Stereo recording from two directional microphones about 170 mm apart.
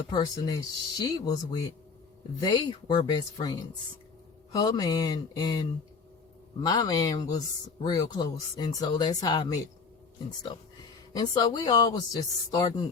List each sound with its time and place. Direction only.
0.1 s speech: 25° left (ahead or behind)
11.1 s speech: 25° left (ahead or behind)